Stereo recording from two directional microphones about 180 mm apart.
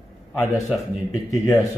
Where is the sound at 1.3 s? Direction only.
15° left (ahead or behind).